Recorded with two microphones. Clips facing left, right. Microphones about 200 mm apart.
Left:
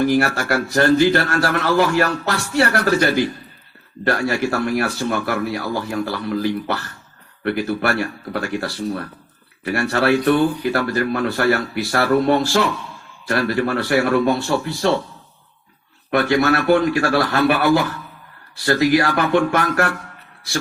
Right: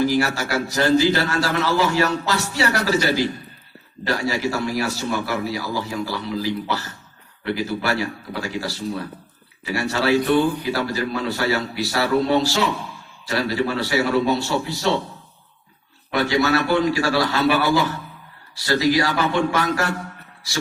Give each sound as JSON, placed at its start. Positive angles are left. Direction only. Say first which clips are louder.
{"t": 0.0, "sound": "speech", "louder": "left 2 dB", "side_deg": 55}
{"t": 16.1, "sound": "speech", "louder": "left 3 dB", "side_deg": 55}